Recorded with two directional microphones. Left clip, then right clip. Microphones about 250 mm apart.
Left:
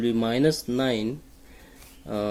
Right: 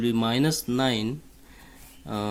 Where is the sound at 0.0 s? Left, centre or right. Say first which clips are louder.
Left 2 dB; right.